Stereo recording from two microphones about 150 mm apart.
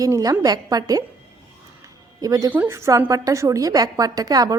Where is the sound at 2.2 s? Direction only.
25° right (ahead or behind).